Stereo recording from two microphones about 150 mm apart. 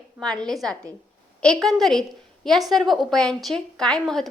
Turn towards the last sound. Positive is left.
turn(degrees=5)  # may be behind; listen again after turning